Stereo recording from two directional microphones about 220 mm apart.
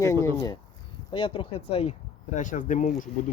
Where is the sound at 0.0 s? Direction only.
15° left (ahead or behind).